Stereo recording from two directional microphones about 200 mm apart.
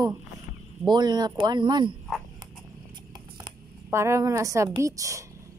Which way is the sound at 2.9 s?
20° right (ahead or behind).